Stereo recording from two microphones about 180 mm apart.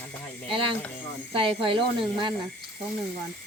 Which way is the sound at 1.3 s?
30° right (ahead or behind).